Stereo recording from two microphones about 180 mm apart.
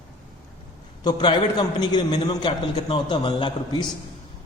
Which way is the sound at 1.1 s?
25° left (ahead or behind).